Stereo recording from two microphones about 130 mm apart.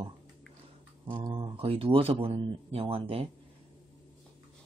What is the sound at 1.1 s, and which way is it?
Speech, 35° right (ahead or behind).